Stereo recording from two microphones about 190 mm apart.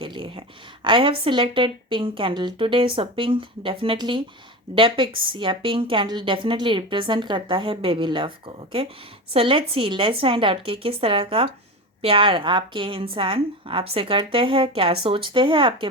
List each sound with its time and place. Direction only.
0.0 s a woman's voice: 25° right (ahead or behind)